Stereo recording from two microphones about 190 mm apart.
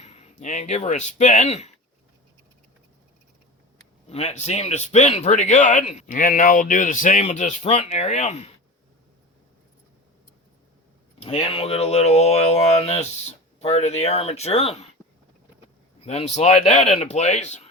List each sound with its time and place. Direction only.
0.0 s speech: 35° left (ahead or behind)
4.1 s speech: 35° left (ahead or behind)
11.2 s speech: 30° left (ahead or behind)
16.0 s speech: 35° left (ahead or behind)